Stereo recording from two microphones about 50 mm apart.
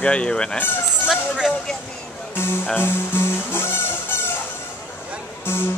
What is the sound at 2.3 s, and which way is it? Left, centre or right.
Speech, left.